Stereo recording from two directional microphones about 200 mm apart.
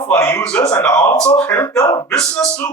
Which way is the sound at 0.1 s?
10° left (ahead or behind).